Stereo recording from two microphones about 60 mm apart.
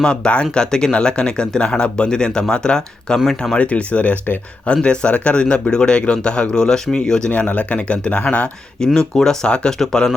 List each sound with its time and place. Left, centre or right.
0.0 s speech: centre
9.0 s speech: centre